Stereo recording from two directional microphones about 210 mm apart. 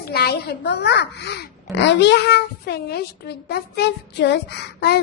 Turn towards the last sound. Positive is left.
turn(degrees=50)  # may be behind; listen again after turning